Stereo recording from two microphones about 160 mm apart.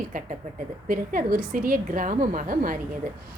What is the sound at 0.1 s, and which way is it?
A woman's voice, 55° right (ahead or behind).